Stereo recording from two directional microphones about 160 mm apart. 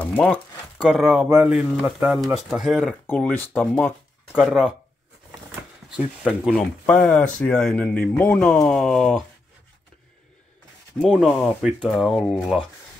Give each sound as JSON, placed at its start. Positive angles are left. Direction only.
{"t": 0.0, "sound": "speech", "side_deg": 10}
{"t": 5.9, "sound": "speech", "side_deg": -5}
{"t": 6.9, "sound": "speech", "side_deg": 10}
{"t": 11.1, "sound": "speech", "side_deg": 0}